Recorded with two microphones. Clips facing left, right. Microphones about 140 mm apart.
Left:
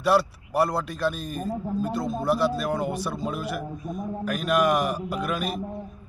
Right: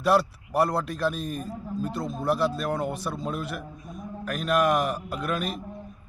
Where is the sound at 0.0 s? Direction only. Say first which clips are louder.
Left 1 dB; 5° left (ahead or behind).